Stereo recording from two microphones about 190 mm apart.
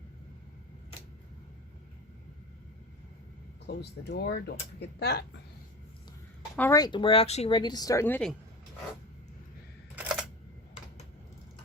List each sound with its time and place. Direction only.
3.7 s speech: 60° left (ahead or behind)
6.6 s speech: 15° left (ahead or behind)
9.9 s camera: 5° right (ahead or behind)